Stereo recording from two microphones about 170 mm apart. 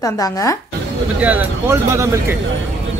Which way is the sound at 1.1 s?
10° right (ahead or behind).